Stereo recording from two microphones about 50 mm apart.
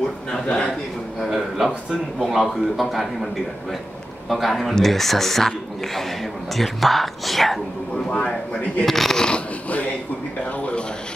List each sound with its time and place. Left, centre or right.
0.3 s speech: left
1.2 s speech: centre
4.3 s speech: centre
8.1 s speech: left
8.8 s speech: centre
9.3 s a sound: left